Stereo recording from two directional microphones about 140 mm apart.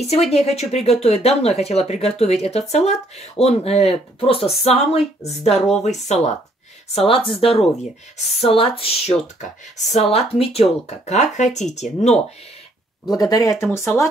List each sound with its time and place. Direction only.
0.0 s speech: 50° left (ahead or behind)
7.1 s speech: 40° left (ahead or behind)
9.4 s speech: 55° left (ahead or behind)
13.1 s speech: 25° left (ahead or behind)